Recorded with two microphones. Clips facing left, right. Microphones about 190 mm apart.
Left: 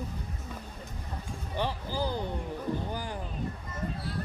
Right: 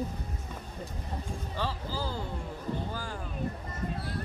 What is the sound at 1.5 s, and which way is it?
Speech, 15° left (ahead or behind).